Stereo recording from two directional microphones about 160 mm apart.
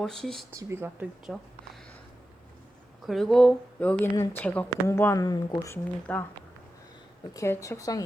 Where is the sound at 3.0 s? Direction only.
Centre (ahead or behind).